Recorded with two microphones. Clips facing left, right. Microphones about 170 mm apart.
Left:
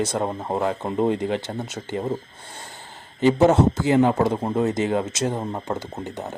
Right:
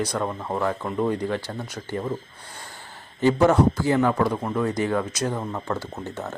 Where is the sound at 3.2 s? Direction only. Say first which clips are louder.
Left 2 dB; 20° left (ahead or behind).